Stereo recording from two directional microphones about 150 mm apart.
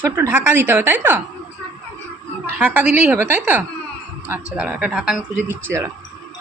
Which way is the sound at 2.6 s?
10° right (ahead or behind).